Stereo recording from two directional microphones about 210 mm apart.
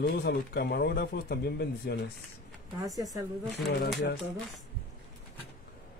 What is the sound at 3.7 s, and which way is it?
Speech, 55° left (ahead or behind).